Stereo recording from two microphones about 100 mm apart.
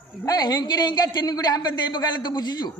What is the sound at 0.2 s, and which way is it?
Speech, 40° left (ahead or behind).